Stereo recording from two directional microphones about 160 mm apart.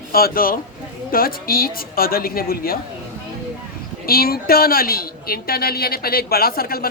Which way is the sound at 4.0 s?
70° left (ahead or behind).